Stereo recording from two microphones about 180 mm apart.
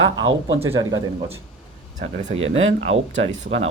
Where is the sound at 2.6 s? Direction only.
90° right.